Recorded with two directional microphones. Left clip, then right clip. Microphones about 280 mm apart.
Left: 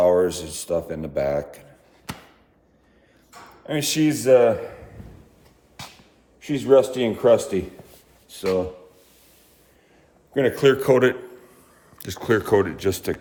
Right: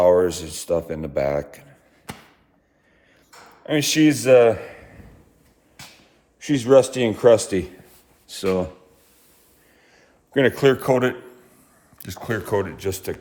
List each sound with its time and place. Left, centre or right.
0.0 s speech: right
3.7 s speech: right
6.4 s speech: right
10.3 s speech: right
10.8 s a man's voice: centre